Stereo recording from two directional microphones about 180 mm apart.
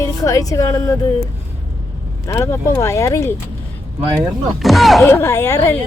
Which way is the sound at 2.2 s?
15° left (ahead or behind).